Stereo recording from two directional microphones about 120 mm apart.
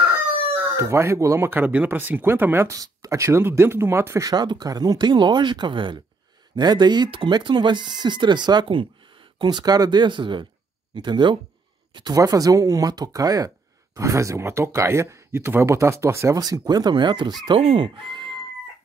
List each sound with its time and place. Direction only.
0.5 s speech: 25° right (ahead or behind); by 17.4 s 40° right (ahead or behind)
17.6 s speech: 55° right (ahead or behind)
17.8 s speech: 40° right (ahead or behind)